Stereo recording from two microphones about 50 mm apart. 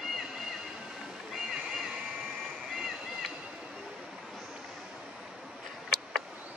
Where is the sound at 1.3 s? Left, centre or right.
Centre.